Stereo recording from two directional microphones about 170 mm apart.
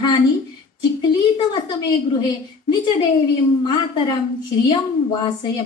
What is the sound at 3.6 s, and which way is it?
A woman's voice, 30° left (ahead or behind).